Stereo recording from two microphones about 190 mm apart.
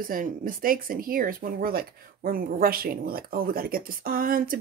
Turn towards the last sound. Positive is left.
turn(degrees=-50)  # may be behind; listen again after turning